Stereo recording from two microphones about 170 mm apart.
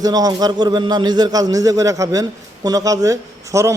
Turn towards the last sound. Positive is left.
turn(degrees=-15)  # may be behind; listen again after turning